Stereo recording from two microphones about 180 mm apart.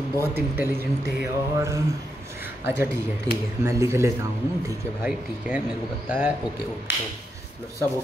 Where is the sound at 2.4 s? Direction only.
15° right (ahead or behind).